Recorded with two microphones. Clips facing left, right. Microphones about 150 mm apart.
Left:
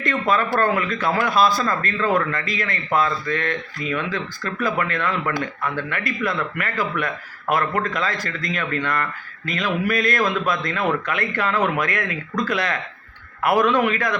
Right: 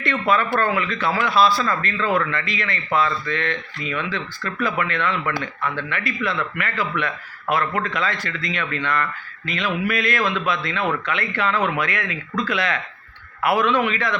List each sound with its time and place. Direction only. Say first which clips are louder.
0.0 s a man's voice: even; 40° left (ahead or behind)